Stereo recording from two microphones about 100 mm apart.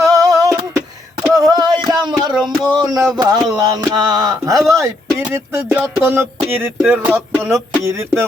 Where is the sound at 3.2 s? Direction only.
40° right (ahead or behind).